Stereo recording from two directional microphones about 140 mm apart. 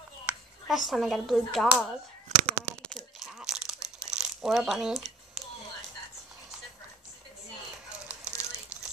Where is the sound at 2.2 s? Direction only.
60° right (ahead or behind).